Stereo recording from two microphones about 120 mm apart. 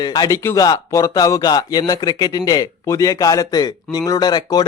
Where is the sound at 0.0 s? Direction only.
30° left (ahead or behind).